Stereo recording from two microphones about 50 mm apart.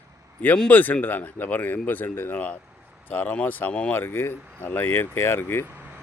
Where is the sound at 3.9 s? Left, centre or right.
Left.